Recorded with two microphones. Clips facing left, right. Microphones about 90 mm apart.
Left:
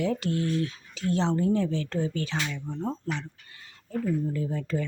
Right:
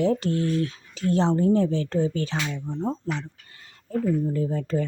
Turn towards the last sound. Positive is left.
turn(degrees=-40)  # may be behind; listen again after turning